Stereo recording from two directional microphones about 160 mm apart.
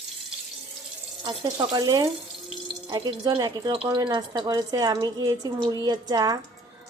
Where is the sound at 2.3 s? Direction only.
Centre (ahead or behind).